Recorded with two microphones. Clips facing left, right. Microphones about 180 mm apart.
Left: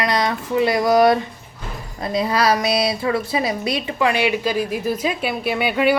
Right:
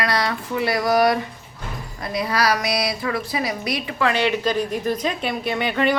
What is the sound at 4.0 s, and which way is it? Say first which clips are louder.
A woman's voice: left 1 dB; 10° left (ahead or behind).